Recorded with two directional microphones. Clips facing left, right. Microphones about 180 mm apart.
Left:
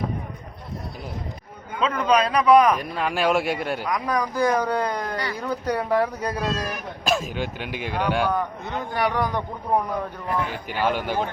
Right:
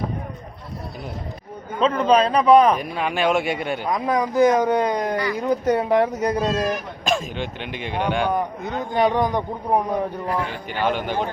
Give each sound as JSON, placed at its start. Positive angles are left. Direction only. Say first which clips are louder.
{"t": 1.8, "sound": "a man's voice", "louder": "right 4 dB", "side_deg": -30}
{"t": 2.8, "sound": "speech", "louder": "right 1 dB", "side_deg": 0}
{"t": 3.8, "sound": "a man's voice", "louder": "right 5 dB", "side_deg": -25}
{"t": 7.0, "sound": "speech", "louder": "left 2 dB", "side_deg": 5}
{"t": 8.3, "sound": "a man's voice", "louder": "right 2 dB", "side_deg": -20}
{"t": 10.7, "sound": "a man's voice", "louder": "right 1 dB", "side_deg": 10}